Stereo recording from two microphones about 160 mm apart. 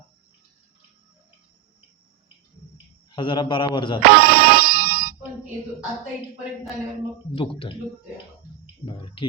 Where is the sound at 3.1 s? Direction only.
30° left (ahead or behind).